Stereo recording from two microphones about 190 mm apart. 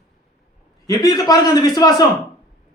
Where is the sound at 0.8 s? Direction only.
20° left (ahead or behind).